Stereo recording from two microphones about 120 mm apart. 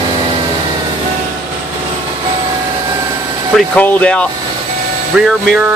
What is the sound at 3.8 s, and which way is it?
Speech, 10° left (ahead or behind).